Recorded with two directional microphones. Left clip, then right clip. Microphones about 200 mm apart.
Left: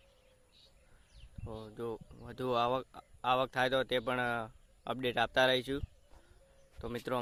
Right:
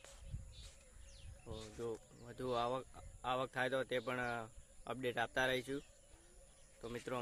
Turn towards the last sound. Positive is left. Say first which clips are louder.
# left 7 dB
turn(degrees=45)  # may be behind; listen again after turning